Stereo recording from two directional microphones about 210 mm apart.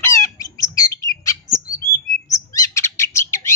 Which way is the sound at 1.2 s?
15° left (ahead or behind).